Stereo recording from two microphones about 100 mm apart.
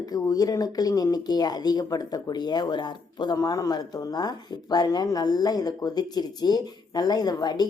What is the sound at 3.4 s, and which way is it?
Speech, 35° left (ahead or behind).